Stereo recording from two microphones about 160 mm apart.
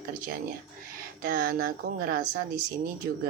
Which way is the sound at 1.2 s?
65° right (ahead or behind).